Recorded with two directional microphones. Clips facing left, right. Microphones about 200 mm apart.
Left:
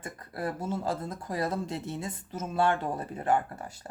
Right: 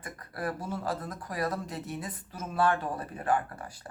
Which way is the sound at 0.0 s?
25° left (ahead or behind).